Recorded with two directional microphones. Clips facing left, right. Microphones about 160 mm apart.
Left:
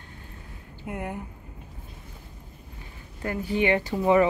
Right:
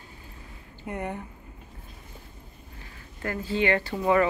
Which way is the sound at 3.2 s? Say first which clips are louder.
Left 1 dB; 15° left (ahead or behind).